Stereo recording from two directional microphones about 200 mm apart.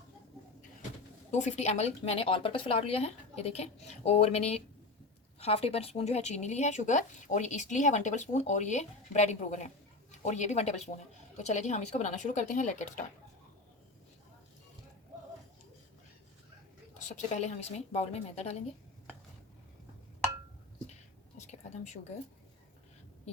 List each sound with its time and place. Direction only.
1.3 s speech: 35° left (ahead or behind)
17.2 s speech: 35° left (ahead or behind)
21.3 s a sound: 35° left (ahead or behind)